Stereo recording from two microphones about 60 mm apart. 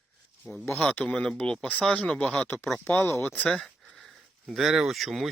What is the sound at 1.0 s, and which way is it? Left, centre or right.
Speech, centre.